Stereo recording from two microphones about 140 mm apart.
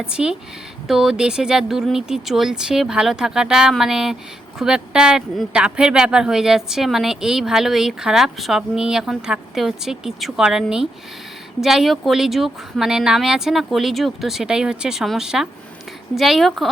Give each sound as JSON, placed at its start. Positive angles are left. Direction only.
{"t": 0.0, "sound": "speech", "side_deg": -5}